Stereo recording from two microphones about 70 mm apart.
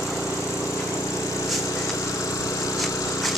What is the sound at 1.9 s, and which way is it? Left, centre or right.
Vehicle, left.